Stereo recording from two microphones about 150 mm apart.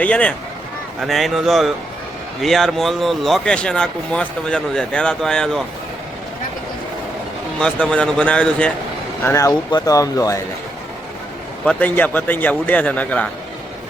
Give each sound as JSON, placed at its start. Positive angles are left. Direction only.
{"t": 0.0, "sound": "a man's voice", "side_deg": 10}
{"t": 7.6, "sound": "a man's voice", "side_deg": 5}
{"t": 9.2, "sound": "speech", "side_deg": 20}
{"t": 11.6, "sound": "a man's voice", "side_deg": 5}